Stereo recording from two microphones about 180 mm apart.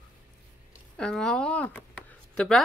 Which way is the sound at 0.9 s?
5° left (ahead or behind).